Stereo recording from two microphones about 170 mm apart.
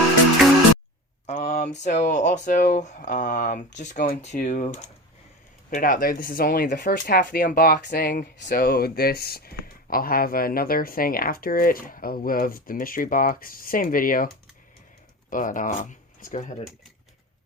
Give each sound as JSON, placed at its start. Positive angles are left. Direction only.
{"t": 1.3, "sound": "speech", "side_deg": 40}
{"t": 8.4, "sound": "speech", "side_deg": 75}
{"t": 15.3, "sound": "speech", "side_deg": 50}